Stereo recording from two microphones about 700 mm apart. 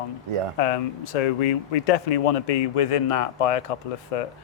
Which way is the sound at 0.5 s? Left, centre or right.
Left.